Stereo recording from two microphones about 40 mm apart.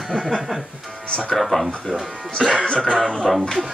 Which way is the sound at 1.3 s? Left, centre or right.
Centre.